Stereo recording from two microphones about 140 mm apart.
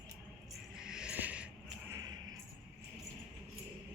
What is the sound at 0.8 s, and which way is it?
Music, 5° right (ahead or behind).